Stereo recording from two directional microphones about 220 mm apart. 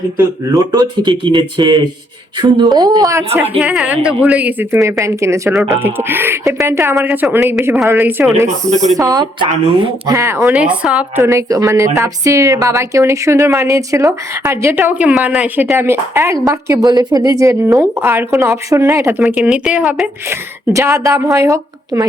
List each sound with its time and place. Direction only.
0.7 s a woman's voice: 20° right (ahead or behind)
8.7 s speech: 30° right (ahead or behind)
9.0 s a woman's voice: 15° right (ahead or behind)